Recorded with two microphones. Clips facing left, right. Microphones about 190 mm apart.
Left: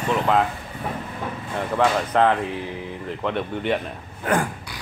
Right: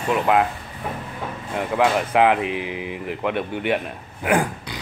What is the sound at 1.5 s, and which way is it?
Speech, 10° right (ahead or behind).